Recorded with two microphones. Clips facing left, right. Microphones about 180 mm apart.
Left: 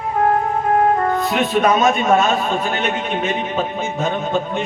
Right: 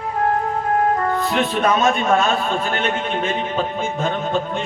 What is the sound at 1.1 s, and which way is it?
A man's voice, 15° left (ahead or behind).